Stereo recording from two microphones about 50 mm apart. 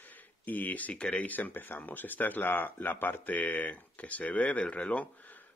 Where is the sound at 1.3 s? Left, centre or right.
Left.